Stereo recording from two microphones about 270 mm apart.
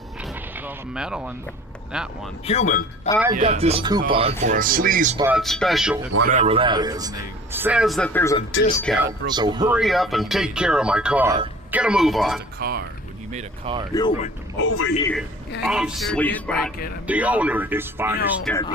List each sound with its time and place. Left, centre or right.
0.6 s speech: centre
2.5 s speech: left
3.3 s speech: right
5.1 s speech: centre
6.2 s speech: right; by 9.0 s centre
9.3 s speech: centre
9.7 s speech: centre
12.5 s speech: right
13.3 s speech: centre
13.9 s speech: centre
14.6 s a man's voice: left
15.6 s speech: centre
18.4 s speech: centre